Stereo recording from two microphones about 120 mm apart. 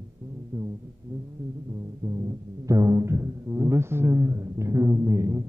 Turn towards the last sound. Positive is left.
turn(degrees=-30)  # may be behind; listen again after turning